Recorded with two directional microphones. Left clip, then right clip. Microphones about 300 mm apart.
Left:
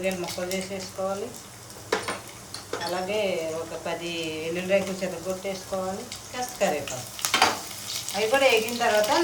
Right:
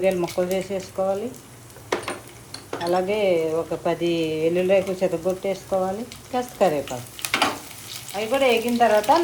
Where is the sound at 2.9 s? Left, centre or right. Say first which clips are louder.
Right 7 dB; centre.